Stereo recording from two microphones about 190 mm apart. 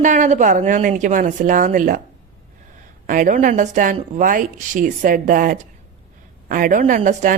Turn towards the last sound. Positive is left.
turn(degrees=-40)  # may be behind; listen again after turning